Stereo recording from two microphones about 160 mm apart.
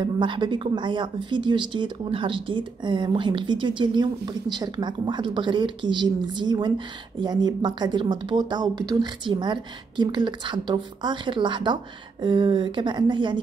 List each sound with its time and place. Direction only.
0.0 s speech: 30° right (ahead or behind)